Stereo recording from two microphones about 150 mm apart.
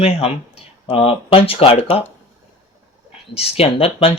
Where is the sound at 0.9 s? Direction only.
40° left (ahead or behind).